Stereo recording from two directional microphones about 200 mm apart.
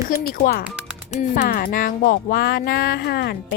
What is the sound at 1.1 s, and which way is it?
Speech, 40° left (ahead or behind).